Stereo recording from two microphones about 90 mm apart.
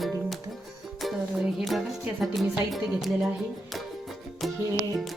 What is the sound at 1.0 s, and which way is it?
Music, centre (ahead or behind).